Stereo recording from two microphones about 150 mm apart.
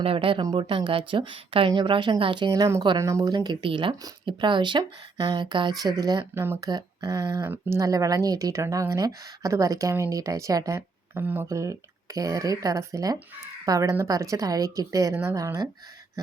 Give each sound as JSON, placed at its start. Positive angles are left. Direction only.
{"t": 0.0, "sound": "a woman's voice", "side_deg": -40}